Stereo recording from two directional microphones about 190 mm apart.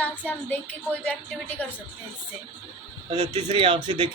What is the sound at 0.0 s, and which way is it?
Speech, 10° left (ahead or behind).